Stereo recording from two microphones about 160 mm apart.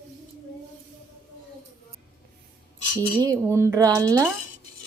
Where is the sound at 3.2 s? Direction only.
20° right (ahead or behind).